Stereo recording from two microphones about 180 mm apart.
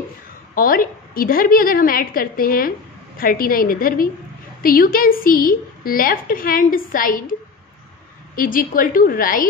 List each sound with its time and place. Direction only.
0.6 s a woman's voice: 55° left (ahead or behind)
8.4 s a woman's voice: 50° left (ahead or behind)